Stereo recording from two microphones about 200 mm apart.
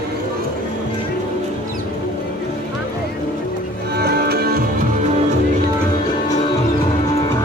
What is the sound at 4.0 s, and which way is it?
Music, 50° right (ahead or behind).